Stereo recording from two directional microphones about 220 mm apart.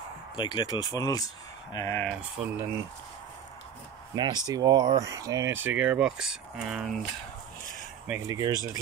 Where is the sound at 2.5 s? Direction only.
10° right (ahead or behind).